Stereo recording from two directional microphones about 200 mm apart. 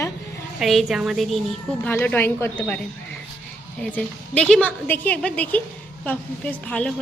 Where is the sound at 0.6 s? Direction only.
Centre (ahead or behind).